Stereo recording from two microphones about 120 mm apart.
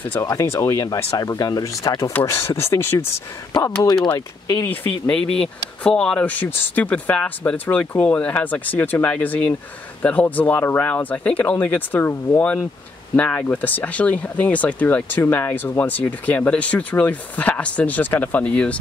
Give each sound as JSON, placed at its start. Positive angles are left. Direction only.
{"t": 0.0, "sound": "speech", "side_deg": 15}
{"t": 0.3, "sound": "speech", "side_deg": 25}
{"t": 3.8, "sound": "speech", "side_deg": 35}
{"t": 5.0, "sound": "speech", "side_deg": 10}